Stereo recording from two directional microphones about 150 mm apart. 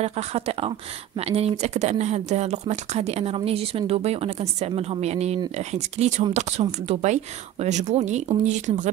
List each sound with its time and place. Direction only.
0.0 s speech: 45° right (ahead or behind)